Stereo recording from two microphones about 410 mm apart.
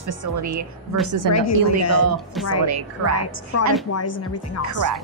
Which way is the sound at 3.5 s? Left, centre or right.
Left.